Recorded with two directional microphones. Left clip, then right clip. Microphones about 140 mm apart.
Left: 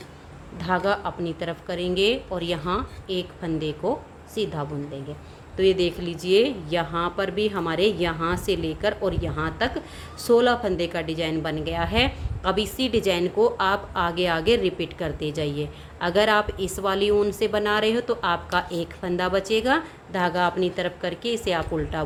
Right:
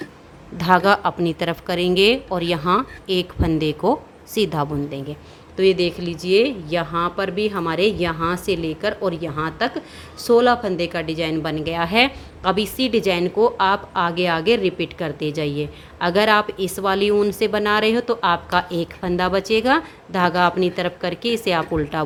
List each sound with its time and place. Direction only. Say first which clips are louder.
0.6 s a woman's voice: right 8 dB; 50° right (ahead or behind)
5.5 s a woman's voice: right 3 dB; 20° right (ahead or behind); by 22.0 s 35° right (ahead or behind)